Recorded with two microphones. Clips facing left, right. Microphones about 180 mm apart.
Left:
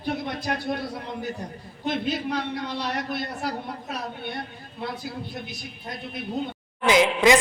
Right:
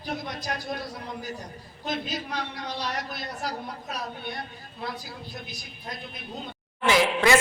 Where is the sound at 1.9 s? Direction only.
60° left (ahead or behind).